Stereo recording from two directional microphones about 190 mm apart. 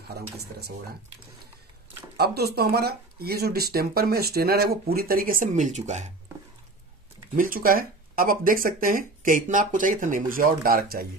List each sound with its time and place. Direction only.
0.1 s speech: 55° right (ahead or behind)
2.1 s speech: 55° right (ahead or behind); by 6.1 s 35° right (ahead or behind)
7.3 s speech: 50° right (ahead or behind)